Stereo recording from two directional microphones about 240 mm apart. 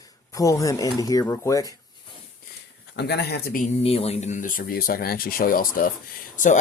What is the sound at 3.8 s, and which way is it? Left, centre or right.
Speech, left.